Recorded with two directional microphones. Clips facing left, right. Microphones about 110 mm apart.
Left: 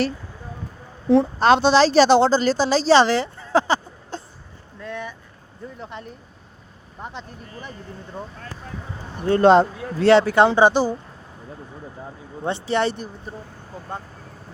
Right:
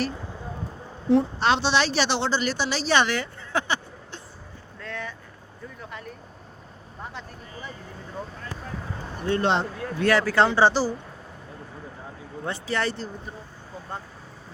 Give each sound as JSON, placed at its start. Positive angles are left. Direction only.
{"t": 1.4, "sound": "a woman's voice", "side_deg": 45}
{"t": 4.8, "sound": "vehicle", "side_deg": 15}
{"t": 5.8, "sound": "speech", "side_deg": 25}
{"t": 9.2, "sound": "speech", "side_deg": 40}
{"t": 10.0, "sound": "speech", "side_deg": 25}
{"t": 12.4, "sound": "speech", "side_deg": 25}